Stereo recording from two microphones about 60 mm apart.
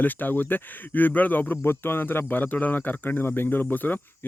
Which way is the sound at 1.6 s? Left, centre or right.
Left.